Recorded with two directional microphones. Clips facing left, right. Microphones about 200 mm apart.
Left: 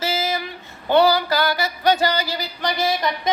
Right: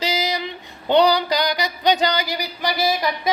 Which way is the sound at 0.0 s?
15° right (ahead or behind).